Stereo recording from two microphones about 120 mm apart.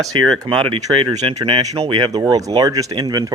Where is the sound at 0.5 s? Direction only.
50° right (ahead or behind).